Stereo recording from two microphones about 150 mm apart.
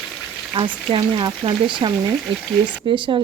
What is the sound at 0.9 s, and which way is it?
Speech, 30° right (ahead or behind).